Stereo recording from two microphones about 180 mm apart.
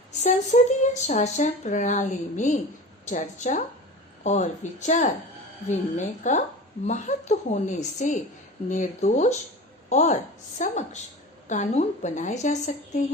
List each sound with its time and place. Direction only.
0.1 s a woman's voice: 40° left (ahead or behind)